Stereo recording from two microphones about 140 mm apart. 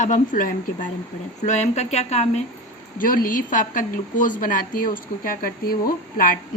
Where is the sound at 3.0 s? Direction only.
85° left.